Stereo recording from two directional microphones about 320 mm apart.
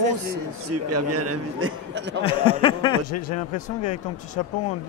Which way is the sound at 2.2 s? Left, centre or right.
Centre.